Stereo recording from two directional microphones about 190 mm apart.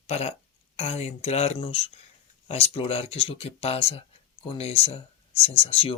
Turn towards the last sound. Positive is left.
turn(degrees=30)  # may be behind; listen again after turning